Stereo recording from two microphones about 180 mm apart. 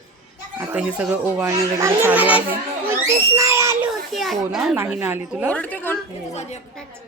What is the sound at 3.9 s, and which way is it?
Speech, centre (ahead or behind).